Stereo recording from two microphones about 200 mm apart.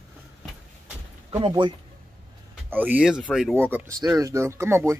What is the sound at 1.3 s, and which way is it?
Speech, 25° right (ahead or behind).